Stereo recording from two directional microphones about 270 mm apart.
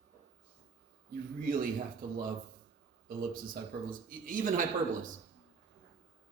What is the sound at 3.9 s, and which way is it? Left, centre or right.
Speech, right.